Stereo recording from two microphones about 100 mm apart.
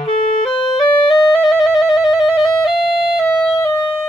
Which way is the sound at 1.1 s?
Centre (ahead or behind).